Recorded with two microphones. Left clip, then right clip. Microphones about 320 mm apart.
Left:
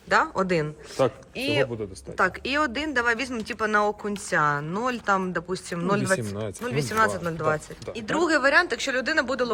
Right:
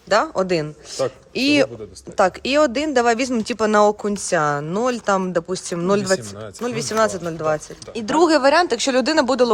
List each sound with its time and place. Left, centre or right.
0.1 s speech: centre